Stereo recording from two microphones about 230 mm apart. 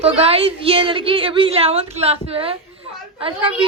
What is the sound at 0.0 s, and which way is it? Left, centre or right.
A woman's voice, right.